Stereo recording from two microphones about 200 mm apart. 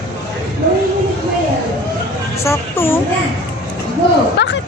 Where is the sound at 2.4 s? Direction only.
10° left (ahead or behind).